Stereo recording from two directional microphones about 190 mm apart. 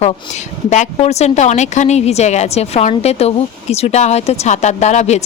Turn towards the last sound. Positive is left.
turn(degrees=35)  # may be behind; listen again after turning